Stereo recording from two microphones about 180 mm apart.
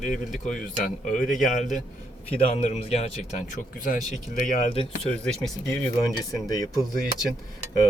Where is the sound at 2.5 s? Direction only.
40° left (ahead or behind).